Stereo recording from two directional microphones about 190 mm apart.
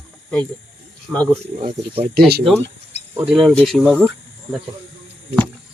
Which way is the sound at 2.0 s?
55° right (ahead or behind).